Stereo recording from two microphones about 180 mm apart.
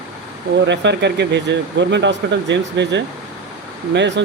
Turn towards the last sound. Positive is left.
turn(degrees=-80)